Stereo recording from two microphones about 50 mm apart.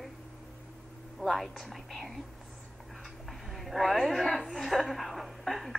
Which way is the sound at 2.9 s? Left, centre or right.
Centre.